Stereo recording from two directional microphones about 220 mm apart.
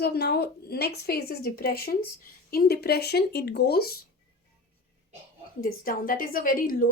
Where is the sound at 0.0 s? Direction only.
45° left (ahead or behind).